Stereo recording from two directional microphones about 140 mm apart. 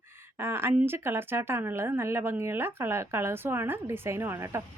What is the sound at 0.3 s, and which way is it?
Speech, 15° right (ahead or behind).